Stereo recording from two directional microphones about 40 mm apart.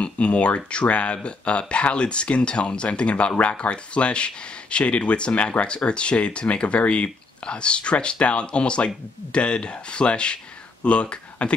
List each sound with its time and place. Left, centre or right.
0.0 s speech: left